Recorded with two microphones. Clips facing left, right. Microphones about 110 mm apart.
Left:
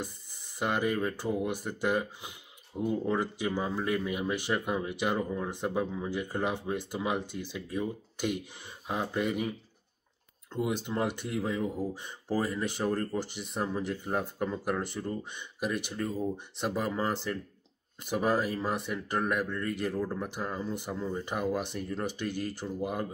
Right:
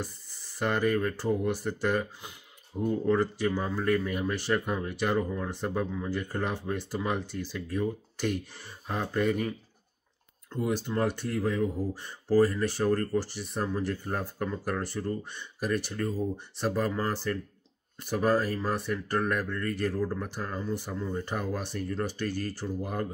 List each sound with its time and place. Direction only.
0.0 s speech: 20° left (ahead or behind)
10.5 s speech: 20° left (ahead or behind)